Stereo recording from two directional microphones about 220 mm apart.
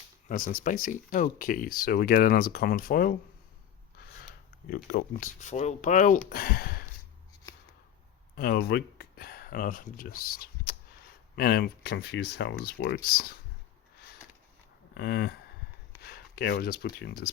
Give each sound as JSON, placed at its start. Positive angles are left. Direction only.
{"t": 0.3, "sound": "speech", "side_deg": 35}
{"t": 4.7, "sound": "speech", "side_deg": 40}
{"t": 8.4, "sound": "speech", "side_deg": 45}
{"t": 14.9, "sound": "speech", "side_deg": 45}